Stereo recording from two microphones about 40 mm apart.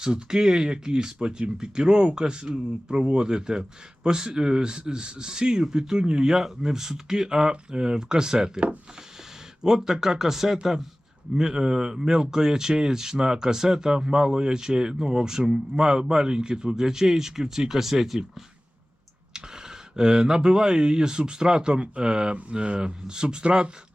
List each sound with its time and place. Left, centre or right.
0.0 s speech: centre
9.6 s speech: centre
20.0 s speech: centre